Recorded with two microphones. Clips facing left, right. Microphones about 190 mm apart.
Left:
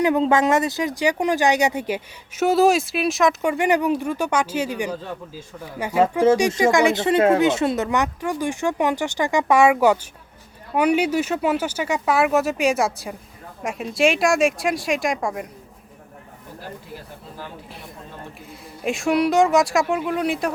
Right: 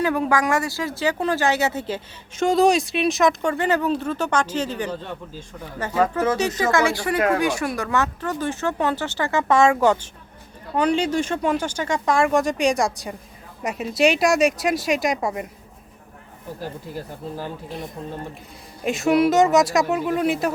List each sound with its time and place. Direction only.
0.0 s speech: 20° left (ahead or behind); by 3.5 s centre (ahead or behind)
3.5 s speech: 15° left (ahead or behind); by 15.4 s 5° right (ahead or behind)
18.8 s speech: centre (ahead or behind)